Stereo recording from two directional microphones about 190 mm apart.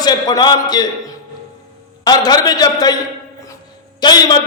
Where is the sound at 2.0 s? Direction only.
20° left (ahead or behind).